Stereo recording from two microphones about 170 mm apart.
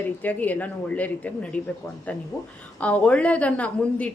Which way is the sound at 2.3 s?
20° left (ahead or behind).